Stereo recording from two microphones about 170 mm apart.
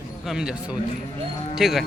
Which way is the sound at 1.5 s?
Centre (ahead or behind).